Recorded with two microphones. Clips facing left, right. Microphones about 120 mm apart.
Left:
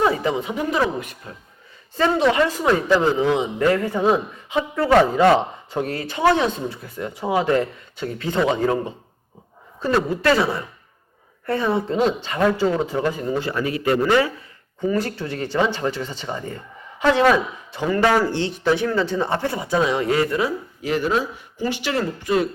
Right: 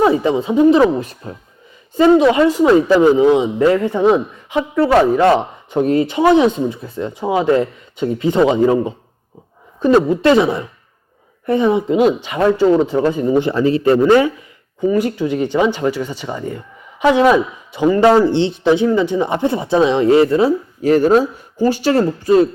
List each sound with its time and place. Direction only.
0.0 s speech: 25° right (ahead or behind)
2.0 s speech: 15° right (ahead or behind)
20.8 s speech: 40° right (ahead or behind)